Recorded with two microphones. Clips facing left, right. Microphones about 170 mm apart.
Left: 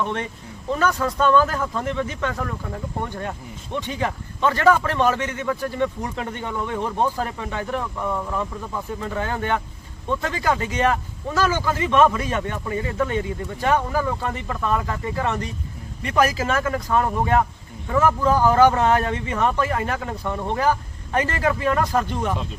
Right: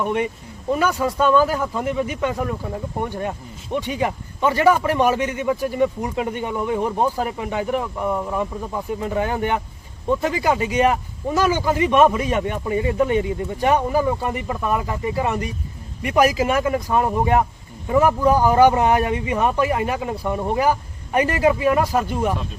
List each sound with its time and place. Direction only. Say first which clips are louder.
0.0 s speech: right 4 dB; 10° right (ahead or behind)